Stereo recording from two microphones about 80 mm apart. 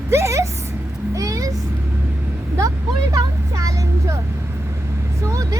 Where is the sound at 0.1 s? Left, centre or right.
Right.